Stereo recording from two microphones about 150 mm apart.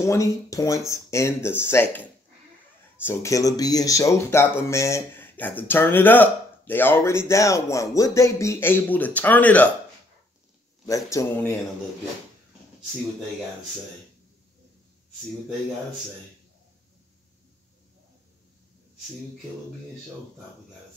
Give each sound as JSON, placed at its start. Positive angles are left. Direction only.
{"t": 0.0, "sound": "speech", "side_deg": 20}
{"t": 10.9, "sound": "speech", "side_deg": 20}